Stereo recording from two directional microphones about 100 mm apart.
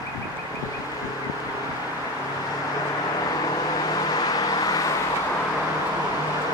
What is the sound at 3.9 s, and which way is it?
Vehicle, 40° left (ahead or behind).